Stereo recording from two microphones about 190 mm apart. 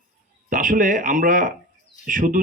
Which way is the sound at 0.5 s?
45° right (ahead or behind).